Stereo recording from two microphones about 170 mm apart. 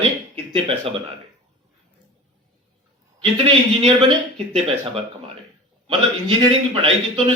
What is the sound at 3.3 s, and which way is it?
Speech, 35° right (ahead or behind).